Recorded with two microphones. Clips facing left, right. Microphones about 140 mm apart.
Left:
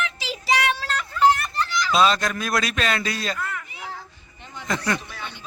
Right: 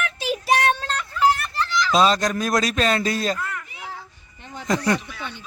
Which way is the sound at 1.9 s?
35° right (ahead or behind).